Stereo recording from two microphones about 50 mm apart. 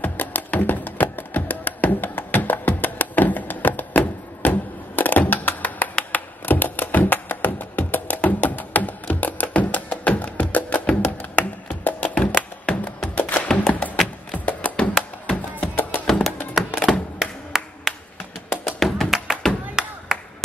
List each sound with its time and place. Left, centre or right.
0.0 s music: left
12.1 s music: left
13.5 s music: centre
14.3 s music: left
14.8 s music: centre
15.6 s music: left
16.1 s music: centre
17.5 s clapping: centre
18.8 s music: centre
19.7 s chop: centre